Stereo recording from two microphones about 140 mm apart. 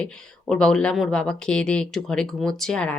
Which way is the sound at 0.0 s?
5° left (ahead or behind).